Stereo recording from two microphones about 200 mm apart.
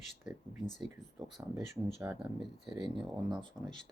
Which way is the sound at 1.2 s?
20° right (ahead or behind).